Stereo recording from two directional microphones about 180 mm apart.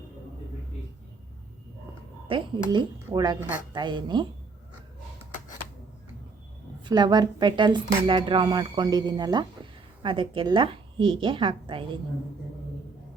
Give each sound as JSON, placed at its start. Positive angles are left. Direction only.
{"t": 2.2, "sound": "speech", "side_deg": -25}
{"t": 6.8, "sound": "speech", "side_deg": -25}